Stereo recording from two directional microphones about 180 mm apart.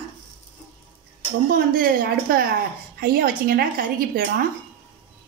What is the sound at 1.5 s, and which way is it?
A woman's voice, 55° right (ahead or behind).